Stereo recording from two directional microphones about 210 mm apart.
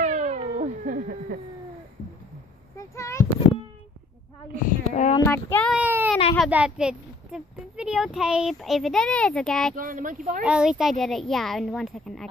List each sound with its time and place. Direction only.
0.0 s cat: 35° right (ahead or behind)
2.8 s a sound: 15° left (ahead or behind)
4.6 s speech: 35° left (ahead or behind)
5.3 s child singing: 5° left (ahead or behind)
5.8 s baby cry: 10° right (ahead or behind)
6.3 s a child's voice: centre (ahead or behind)
9.8 s speech: 40° right (ahead or behind)
10.4 s a child's voice: 5° right (ahead or behind)